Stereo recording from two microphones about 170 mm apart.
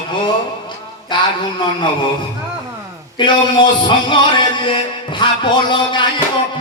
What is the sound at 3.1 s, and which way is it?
Music, 30° left (ahead or behind).